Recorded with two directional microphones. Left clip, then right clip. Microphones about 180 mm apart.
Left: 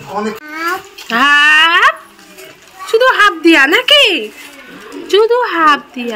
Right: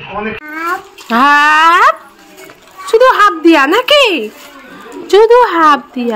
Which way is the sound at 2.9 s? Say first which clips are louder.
Right 3 dB; 40° right (ahead or behind).